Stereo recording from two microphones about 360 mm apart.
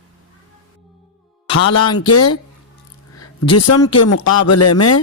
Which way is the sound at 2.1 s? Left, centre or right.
Left.